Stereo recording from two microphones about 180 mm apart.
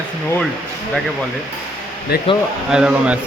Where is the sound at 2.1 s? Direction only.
60° left (ahead or behind).